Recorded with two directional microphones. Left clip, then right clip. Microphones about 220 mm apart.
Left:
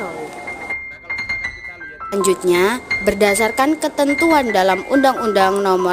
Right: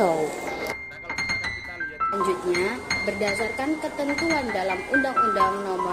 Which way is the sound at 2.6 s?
45° left (ahead or behind).